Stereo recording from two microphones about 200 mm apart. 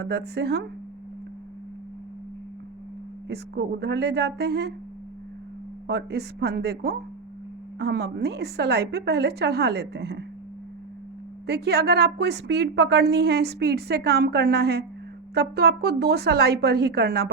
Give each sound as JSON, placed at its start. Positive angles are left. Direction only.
{"t": 0.0, "sound": "a woman's voice", "side_deg": -55}
{"t": 3.2, "sound": "a woman's voice", "side_deg": -55}
{"t": 5.9, "sound": "a woman's voice", "side_deg": -55}
{"t": 11.4, "sound": "a woman's voice", "side_deg": -55}